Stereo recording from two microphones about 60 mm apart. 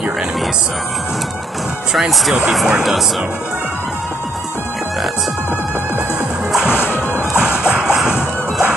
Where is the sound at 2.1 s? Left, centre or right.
Centre.